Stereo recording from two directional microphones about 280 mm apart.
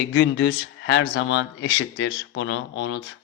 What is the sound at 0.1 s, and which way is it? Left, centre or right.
Speech, left.